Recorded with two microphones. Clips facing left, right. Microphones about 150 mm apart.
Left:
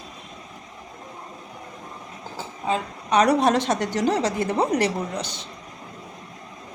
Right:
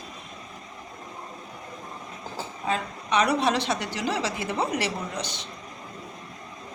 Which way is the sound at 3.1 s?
40° left (ahead or behind).